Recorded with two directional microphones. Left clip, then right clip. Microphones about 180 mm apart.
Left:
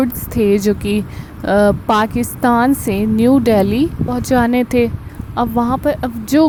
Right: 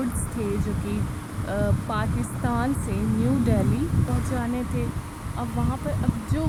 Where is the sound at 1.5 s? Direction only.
50° left (ahead or behind).